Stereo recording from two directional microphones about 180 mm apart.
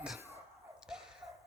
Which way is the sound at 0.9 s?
5° right (ahead or behind).